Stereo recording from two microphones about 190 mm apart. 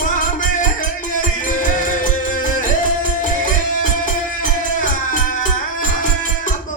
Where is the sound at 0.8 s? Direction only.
45° left (ahead or behind).